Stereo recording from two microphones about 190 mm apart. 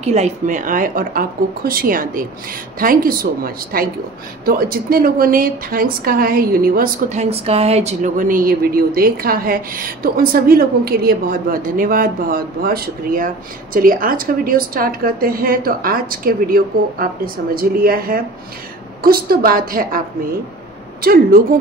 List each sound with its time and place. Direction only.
0.0 s a woman's voice: 35° right (ahead or behind)
21.0 s a woman's voice: 50° right (ahead or behind)